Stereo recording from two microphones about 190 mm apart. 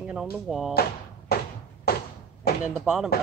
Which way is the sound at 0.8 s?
55° left (ahead or behind).